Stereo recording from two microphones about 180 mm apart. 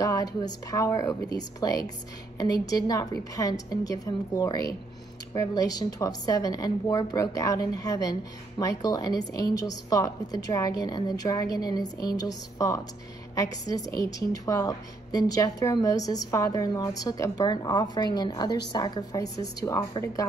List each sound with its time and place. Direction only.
0.0 s a woman's voice: 20° left (ahead or behind)